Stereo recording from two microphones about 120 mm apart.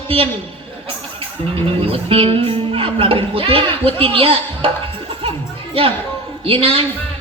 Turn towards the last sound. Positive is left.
turn(degrees=-50)  # may be behind; listen again after turning